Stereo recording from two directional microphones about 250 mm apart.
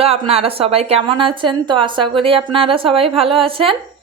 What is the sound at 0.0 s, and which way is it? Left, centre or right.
A woman's voice, right.